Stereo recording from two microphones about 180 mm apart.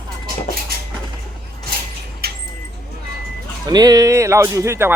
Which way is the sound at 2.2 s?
60° right (ahead or behind).